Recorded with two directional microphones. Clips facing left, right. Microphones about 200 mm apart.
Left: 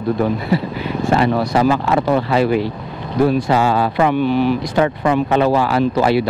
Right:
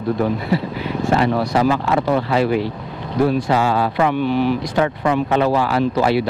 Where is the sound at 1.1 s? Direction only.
20° left (ahead or behind).